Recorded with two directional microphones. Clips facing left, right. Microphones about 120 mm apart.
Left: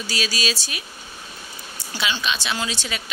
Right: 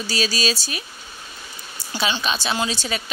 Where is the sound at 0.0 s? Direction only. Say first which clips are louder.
Right 3 dB; 40° right (ahead or behind).